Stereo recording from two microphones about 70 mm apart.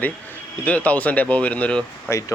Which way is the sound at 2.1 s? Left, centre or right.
Left.